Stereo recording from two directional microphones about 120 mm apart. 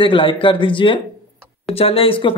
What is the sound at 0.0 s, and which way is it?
Speech, 45° left (ahead or behind).